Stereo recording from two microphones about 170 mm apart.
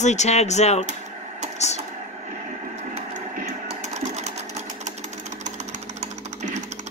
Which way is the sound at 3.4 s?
40° right (ahead or behind).